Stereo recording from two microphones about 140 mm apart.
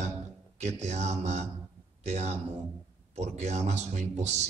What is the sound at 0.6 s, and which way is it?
Speech, 55° right (ahead or behind).